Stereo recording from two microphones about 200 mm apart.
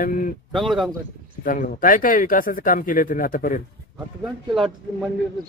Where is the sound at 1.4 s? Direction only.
40° left (ahead or behind).